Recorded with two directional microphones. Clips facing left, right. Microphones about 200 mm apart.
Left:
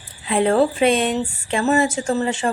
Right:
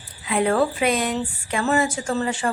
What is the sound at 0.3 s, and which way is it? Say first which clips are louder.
A woman's voice: left 3 dB; 30° left (ahead or behind).